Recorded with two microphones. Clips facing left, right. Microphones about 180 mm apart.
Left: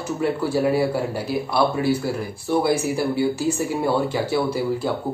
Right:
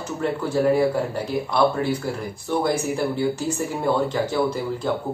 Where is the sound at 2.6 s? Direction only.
10° left (ahead or behind).